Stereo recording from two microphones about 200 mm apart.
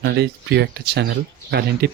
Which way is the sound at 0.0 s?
60° right (ahead or behind).